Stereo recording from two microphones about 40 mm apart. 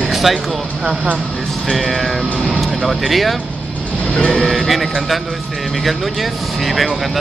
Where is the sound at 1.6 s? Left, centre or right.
Centre.